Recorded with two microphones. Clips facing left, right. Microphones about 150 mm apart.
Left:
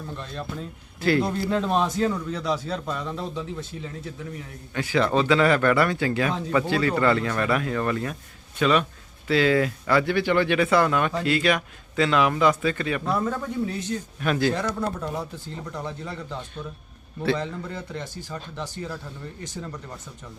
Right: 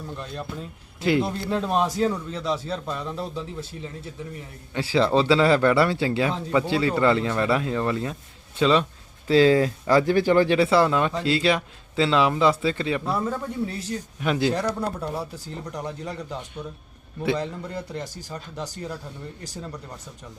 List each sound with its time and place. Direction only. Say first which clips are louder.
0.9 s a man's voice: even; 20° right (ahead or behind)
1.2 s speech: left 1 dB; 5° right (ahead or behind)
4.7 s speech: right 2 dB; 25° right (ahead or behind)
13.1 s a man's voice: left 1 dB; 10° right (ahead or behind)
13.7 s speech: left 2 dB; 30° right (ahead or behind)
14.2 s a man's voice: right 1 dB; 20° right (ahead or behind)
17.9 s speech: right 1 dB; 40° right (ahead or behind)